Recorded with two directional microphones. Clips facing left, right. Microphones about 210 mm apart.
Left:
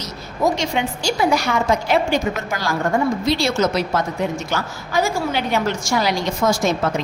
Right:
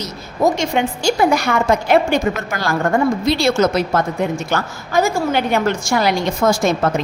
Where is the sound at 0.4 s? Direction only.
50° right (ahead or behind).